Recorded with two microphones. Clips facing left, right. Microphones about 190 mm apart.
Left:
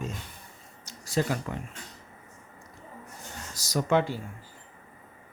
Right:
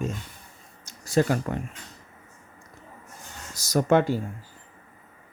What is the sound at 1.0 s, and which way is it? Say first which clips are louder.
Speech: right 5 dB; 50° right (ahead or behind).